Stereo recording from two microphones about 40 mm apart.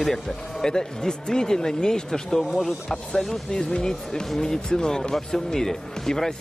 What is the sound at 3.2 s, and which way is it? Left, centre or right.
Speech, centre.